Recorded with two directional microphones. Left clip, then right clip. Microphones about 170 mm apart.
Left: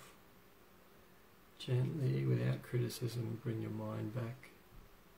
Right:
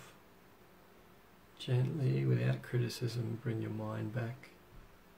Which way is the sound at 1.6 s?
15° left (ahead or behind).